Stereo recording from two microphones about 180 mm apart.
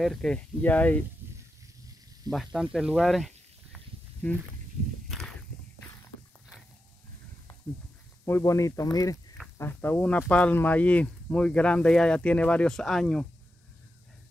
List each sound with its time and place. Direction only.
0.0 s speech: centre (ahead or behind)
2.3 s a sound: centre (ahead or behind)
8.3 s speech: 15° left (ahead or behind)